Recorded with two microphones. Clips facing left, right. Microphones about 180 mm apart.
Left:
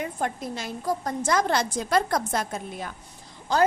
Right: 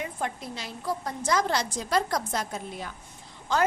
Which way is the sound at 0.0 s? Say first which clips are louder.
Left 3 dB; 45° left (ahead or behind).